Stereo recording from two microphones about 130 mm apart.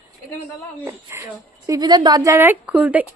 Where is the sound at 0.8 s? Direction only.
25° right (ahead or behind).